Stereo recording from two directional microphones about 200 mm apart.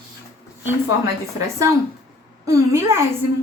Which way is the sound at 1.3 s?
15° right (ahead or behind).